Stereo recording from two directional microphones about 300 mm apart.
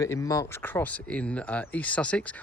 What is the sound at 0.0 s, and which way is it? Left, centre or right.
Speech, centre.